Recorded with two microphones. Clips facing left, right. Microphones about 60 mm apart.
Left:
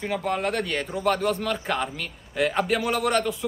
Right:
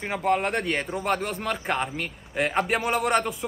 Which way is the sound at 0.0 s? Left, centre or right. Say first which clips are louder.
Right 2 dB; right.